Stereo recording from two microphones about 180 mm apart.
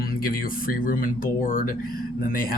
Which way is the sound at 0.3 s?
50° left (ahead or behind).